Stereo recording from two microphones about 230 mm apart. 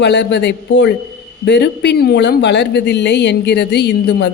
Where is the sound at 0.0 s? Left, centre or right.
Left.